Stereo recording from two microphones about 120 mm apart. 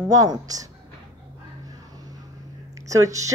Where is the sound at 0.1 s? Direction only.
30° right (ahead or behind).